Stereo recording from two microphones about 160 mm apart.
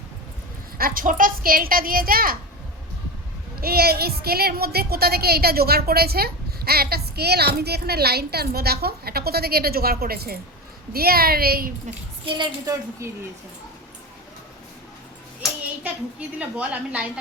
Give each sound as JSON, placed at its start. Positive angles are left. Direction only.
{"t": 0.8, "sound": "a woman's voice", "side_deg": -60}
{"t": 3.6, "sound": "a woman's voice", "side_deg": -75}
{"t": 12.2, "sound": "a woman's voice", "side_deg": -25}
{"t": 16.4, "sound": "a woman's voice", "side_deg": -10}